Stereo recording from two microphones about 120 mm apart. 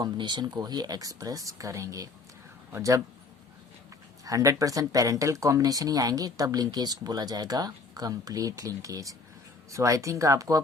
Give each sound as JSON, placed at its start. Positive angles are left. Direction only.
{"t": 0.0, "sound": "speech", "side_deg": -40}
{"t": 4.3, "sound": "speech", "side_deg": -30}